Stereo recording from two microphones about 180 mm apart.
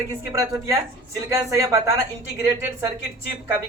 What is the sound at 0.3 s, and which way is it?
Speech, 15° right (ahead or behind).